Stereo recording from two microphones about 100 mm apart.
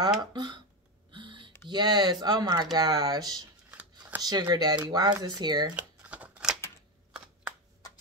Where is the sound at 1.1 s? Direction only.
55° right (ahead or behind).